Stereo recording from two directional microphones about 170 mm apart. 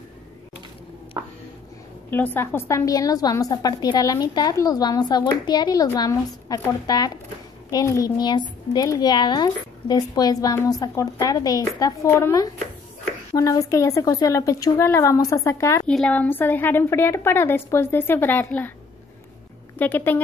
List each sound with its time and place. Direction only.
2.0 s a woman's voice: 10° left (ahead or behind)
15.9 s a woman's voice: 5° left (ahead or behind)
19.8 s a woman's voice: 10° left (ahead or behind)